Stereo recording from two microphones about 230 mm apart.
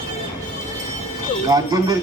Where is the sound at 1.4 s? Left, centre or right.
Centre.